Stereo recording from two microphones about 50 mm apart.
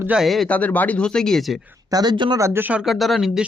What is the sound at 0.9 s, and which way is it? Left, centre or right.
Speech, centre.